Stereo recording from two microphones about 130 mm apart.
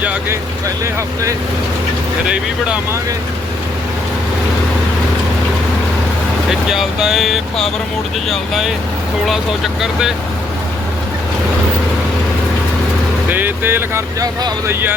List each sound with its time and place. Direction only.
0.0 s speech: 10° right (ahead or behind)
2.2 s speech: 10° right (ahead or behind)
6.5 s speech: 5° right (ahead or behind)
13.3 s speech: 15° right (ahead or behind)